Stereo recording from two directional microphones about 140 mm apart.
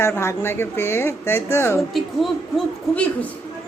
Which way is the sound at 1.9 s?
Centre (ahead or behind).